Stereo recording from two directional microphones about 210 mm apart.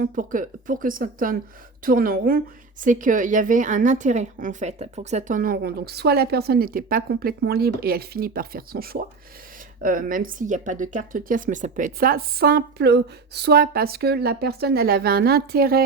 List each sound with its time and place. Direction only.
0.0 s a woman's voice: 40° right (ahead or behind)